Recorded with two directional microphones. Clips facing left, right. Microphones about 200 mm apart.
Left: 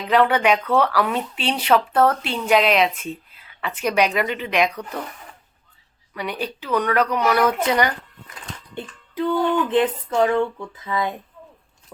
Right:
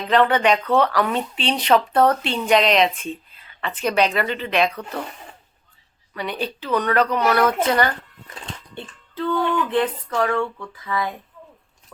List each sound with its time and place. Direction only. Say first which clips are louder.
0.1 s speech: even; 10° left (ahead or behind)
6.1 s speech: right 1 dB; 10° left (ahead or behind)